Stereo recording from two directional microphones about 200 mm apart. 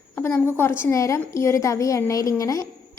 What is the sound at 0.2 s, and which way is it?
A woman's voice, 10° left (ahead or behind).